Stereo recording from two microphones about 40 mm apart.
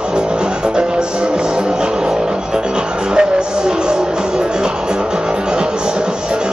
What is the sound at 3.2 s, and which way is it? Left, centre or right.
Music, right.